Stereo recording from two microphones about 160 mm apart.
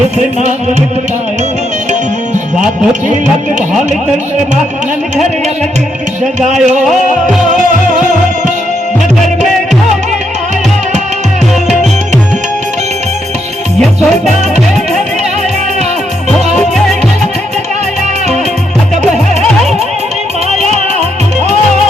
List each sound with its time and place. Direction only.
6.4 s music: 45° right (ahead or behind)
6.8 s music: centre (ahead or behind)